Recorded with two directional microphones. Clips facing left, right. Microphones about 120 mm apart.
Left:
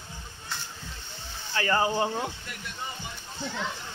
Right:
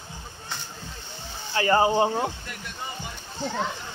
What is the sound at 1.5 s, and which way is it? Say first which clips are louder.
Speech: right 5 dB; 25° right (ahead or behind).